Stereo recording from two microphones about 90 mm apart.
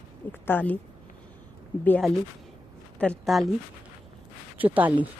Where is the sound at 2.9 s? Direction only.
10° left (ahead or behind).